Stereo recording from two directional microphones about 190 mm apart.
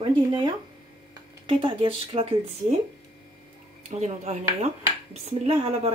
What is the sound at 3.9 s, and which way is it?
Speech, 35° right (ahead or behind).